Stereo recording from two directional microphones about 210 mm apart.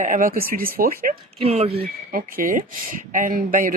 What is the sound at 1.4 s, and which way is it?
Speech, 30° right (ahead or behind).